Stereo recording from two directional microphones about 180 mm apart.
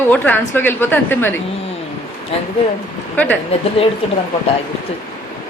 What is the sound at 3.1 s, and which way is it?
Speech, 10° left (ahead or behind).